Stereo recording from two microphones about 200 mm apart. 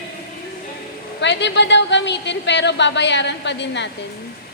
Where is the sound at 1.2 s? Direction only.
60° left (ahead or behind).